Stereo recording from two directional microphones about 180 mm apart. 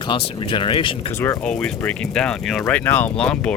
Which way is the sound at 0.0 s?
25° left (ahead or behind).